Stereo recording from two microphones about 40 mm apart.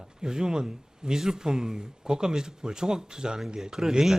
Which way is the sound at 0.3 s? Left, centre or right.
Centre.